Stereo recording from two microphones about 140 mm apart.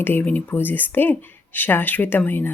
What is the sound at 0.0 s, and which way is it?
Speech, 15° left (ahead or behind).